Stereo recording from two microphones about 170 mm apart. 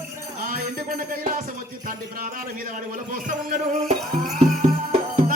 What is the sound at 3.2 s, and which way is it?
Music, 50° right (ahead or behind).